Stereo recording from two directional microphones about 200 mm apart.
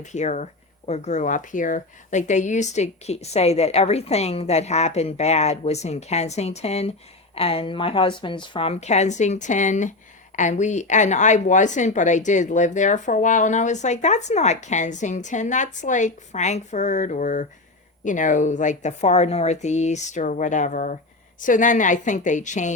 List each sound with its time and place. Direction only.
0.0 s a woman's voice: 35° left (ahead or behind)